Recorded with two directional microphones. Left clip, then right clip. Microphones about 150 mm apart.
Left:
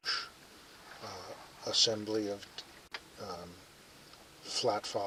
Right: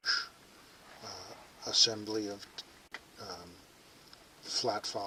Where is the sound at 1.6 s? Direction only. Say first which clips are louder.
Right 1 dB; 15° right (ahead or behind).